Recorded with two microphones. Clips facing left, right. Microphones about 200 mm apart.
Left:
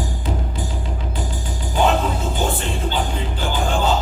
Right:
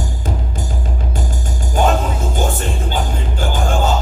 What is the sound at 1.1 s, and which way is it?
Music, 45° right (ahead or behind).